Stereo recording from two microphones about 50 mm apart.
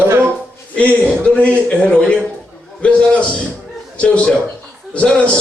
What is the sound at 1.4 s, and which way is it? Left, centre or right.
A man's voice, left.